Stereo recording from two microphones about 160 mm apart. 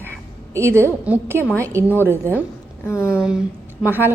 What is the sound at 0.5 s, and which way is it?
A woman's voice, 15° right (ahead or behind).